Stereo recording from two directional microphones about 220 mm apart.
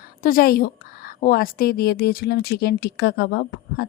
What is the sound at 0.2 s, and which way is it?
A woman's voice, 40° left (ahead or behind).